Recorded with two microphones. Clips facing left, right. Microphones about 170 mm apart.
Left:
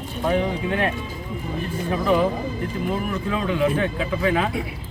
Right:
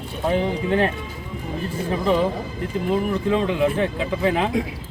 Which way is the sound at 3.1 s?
30° right (ahead or behind).